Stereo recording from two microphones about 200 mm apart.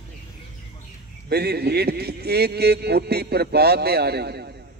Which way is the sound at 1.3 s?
55° right (ahead or behind).